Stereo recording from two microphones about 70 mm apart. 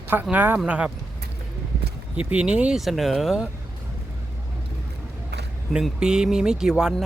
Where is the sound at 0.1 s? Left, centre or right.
Right.